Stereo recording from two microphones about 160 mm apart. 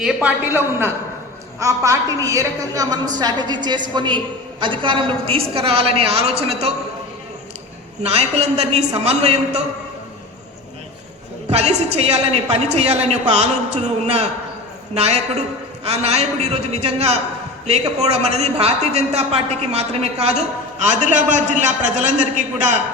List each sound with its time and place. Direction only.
0.0 s a woman's voice: 5° right (ahead or behind); by 6.7 s 40° right (ahead or behind)
8.0 s a woman's voice: 40° right (ahead or behind)
11.4 s a woman's voice: 40° right (ahead or behind)